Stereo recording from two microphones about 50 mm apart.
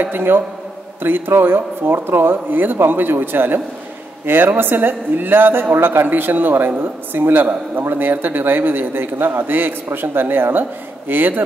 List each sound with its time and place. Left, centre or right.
0.0 s a man's voice: right